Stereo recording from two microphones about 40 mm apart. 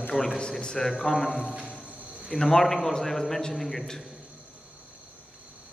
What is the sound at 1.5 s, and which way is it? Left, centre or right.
Music, right.